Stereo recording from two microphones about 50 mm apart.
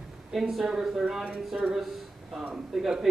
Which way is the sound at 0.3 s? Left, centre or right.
Centre.